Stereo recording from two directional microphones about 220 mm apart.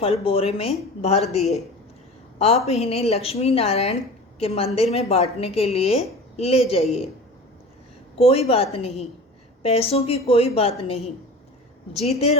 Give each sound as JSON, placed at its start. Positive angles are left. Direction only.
{"t": 0.0, "sound": "a woman's voice", "side_deg": 25}
{"t": 2.6, "sound": "a woman's voice", "side_deg": 30}
{"t": 8.2, "sound": "a woman's voice", "side_deg": 25}